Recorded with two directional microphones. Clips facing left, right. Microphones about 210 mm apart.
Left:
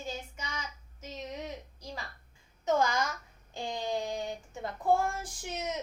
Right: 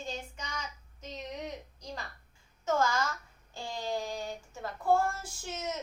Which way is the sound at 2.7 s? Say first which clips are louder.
Left 1 dB; 15° left (ahead or behind).